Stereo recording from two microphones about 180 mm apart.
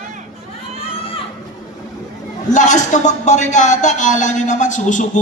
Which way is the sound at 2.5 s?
40° left (ahead or behind).